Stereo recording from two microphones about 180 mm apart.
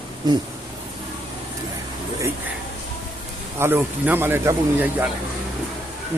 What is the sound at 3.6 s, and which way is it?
A man's voice, 15° right (ahead or behind).